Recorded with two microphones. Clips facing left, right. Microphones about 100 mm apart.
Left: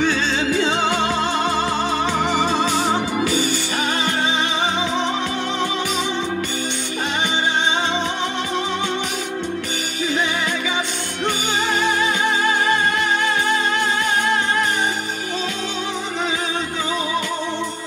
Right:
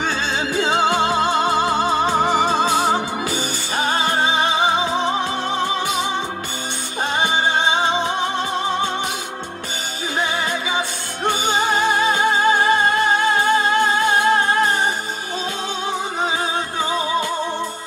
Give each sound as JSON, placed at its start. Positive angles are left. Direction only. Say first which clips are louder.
{"t": 0.7, "sound": "music", "louder": "right 2 dB", "side_deg": -20}
{"t": 1.7, "sound": "music", "louder": "right 3 dB", "side_deg": -40}
{"t": 3.3, "sound": "music", "louder": "left 2 dB", "side_deg": -30}
{"t": 3.9, "sound": "music", "louder": "right 4 dB", "side_deg": -40}
{"t": 11.4, "sound": "music", "louder": "right 5 dB", "side_deg": -20}
{"t": 12.1, "sound": "music", "louder": "right 3 dB", "side_deg": -40}